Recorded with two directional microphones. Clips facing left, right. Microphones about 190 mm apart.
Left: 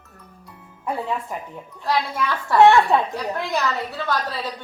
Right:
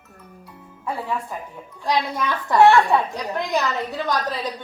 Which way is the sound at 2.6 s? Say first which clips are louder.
Even; 20° left (ahead or behind).